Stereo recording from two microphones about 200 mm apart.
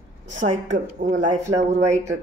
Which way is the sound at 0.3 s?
40° right (ahead or behind).